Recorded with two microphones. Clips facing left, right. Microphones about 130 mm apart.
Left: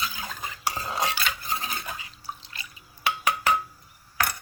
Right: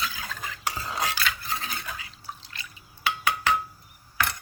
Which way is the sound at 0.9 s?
20° left (ahead or behind).